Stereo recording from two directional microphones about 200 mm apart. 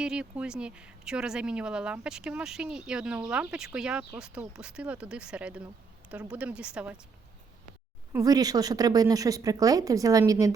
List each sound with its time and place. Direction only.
0.0 s speech: 5° right (ahead or behind)
8.1 s speech: 20° right (ahead or behind)